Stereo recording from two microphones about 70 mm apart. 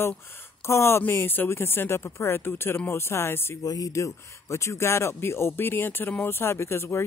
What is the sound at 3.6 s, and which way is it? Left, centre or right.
Speech, left.